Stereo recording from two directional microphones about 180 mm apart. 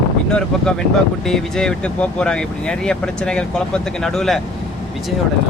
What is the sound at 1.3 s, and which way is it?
Speech, 5° left (ahead or behind).